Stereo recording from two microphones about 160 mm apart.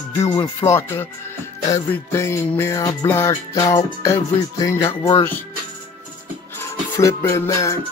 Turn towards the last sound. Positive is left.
turn(degrees=20)  # may be behind; listen again after turning